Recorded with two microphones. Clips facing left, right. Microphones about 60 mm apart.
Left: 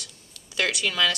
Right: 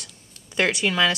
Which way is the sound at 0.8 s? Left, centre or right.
Right.